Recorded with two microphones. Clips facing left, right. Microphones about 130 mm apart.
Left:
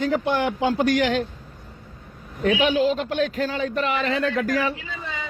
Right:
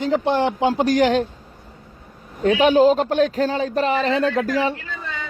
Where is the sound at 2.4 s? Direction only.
30° right (ahead or behind).